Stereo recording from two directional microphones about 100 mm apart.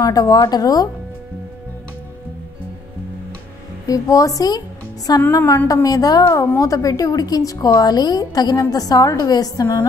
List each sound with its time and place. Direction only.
0.0 s a woman's voice: 40° left (ahead or behind)
3.8 s a woman's voice: 35° left (ahead or behind)